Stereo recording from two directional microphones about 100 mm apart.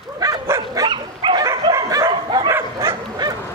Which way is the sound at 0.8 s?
50° right (ahead or behind).